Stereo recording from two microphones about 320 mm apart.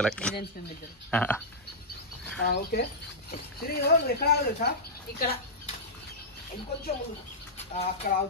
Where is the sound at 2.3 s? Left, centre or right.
Left.